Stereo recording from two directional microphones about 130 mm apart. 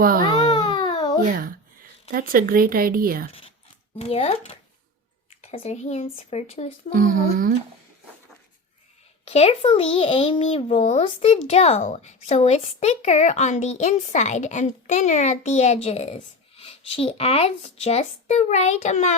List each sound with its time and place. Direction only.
0.4 s babbling: 35° left (ahead or behind)
1.2 s speech: 90° right
3.9 s a child's voice: 50° left (ahead or behind)
6.9 s speech: 90° right
9.2 s a child's voice: 50° left (ahead or behind)
11.8 s a woman's voice: 75° left (ahead or behind)